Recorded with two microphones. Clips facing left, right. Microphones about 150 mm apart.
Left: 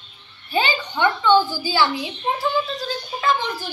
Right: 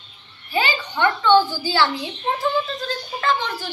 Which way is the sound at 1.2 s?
10° left (ahead or behind).